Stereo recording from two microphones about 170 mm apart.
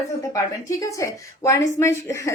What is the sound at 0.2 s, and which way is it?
A woman's voice, 20° left (ahead or behind).